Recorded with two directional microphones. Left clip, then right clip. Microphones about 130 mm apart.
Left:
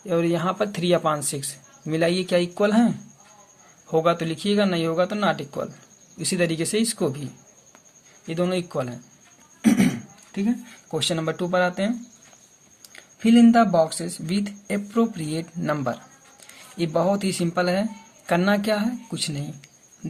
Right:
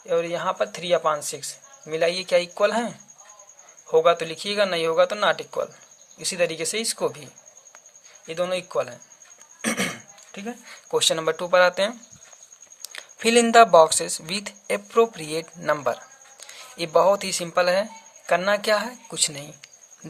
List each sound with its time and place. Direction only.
0.0 s speech: 10° right (ahead or behind); by 5.7 s 25° right (ahead or behind)
6.1 s speech: 15° right (ahead or behind)
8.3 s speech: 25° right (ahead or behind)
9.6 s a sound: 70° right (ahead or behind)
10.3 s speech: 50° right (ahead or behind)
11.1 s speech: 35° right (ahead or behind)
18.6 s speech: 40° right (ahead or behind)